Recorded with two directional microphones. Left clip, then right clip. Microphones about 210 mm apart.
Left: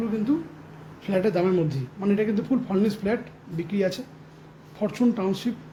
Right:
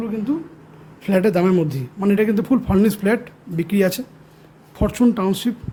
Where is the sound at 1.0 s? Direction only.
30° right (ahead or behind).